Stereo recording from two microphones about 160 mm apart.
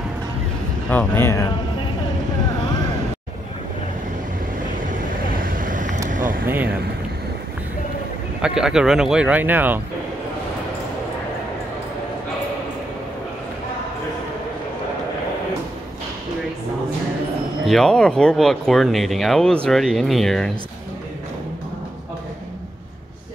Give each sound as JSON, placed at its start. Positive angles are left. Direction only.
{"t": 0.8, "sound": "speech", "side_deg": 10}
{"t": 4.7, "sound": "vehicle", "side_deg": -55}
{"t": 6.0, "sound": "a sound", "side_deg": -55}
{"t": 6.4, "sound": "a sound", "side_deg": -15}
{"t": 8.4, "sound": "speech", "side_deg": -5}
{"t": 17.6, "sound": "speech", "side_deg": 0}